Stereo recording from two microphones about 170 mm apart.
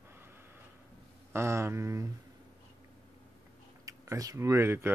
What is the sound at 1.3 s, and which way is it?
Speech, 15° right (ahead or behind).